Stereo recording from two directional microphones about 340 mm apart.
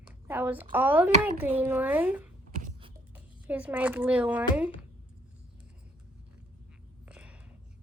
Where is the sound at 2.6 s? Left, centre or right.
Right.